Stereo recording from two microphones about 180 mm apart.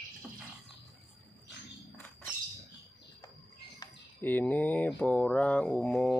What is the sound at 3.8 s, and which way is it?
Mantra, 10° left (ahead or behind).